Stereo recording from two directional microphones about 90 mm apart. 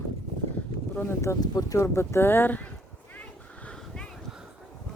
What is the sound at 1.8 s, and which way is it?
Speech, 30° left (ahead or behind).